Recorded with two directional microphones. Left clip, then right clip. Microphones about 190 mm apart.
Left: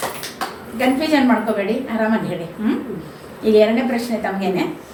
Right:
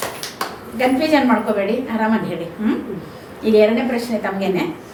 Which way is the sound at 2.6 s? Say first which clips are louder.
Even; 15° right (ahead or behind).